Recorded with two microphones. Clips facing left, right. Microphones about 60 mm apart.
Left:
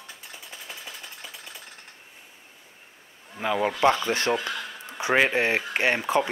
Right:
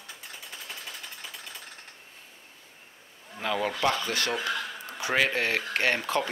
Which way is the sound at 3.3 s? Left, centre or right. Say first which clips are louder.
Left 4 dB; centre.